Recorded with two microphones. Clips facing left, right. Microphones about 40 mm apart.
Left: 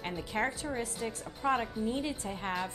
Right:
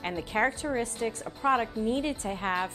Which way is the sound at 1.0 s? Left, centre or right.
Right.